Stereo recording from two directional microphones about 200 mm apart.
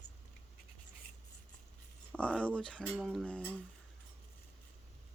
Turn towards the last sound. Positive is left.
turn(degrees=5)  # may be behind; listen again after turning